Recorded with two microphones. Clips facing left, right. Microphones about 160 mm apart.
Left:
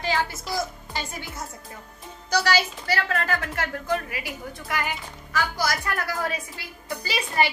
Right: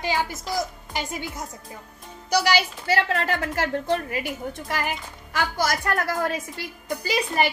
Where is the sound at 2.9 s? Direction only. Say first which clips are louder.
Right 3 dB; 30° right (ahead or behind).